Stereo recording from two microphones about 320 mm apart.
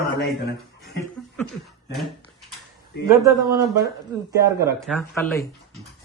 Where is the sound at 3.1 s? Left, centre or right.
Centre.